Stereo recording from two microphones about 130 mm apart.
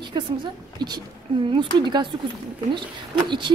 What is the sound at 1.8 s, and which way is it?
Speech, 35° right (ahead or behind).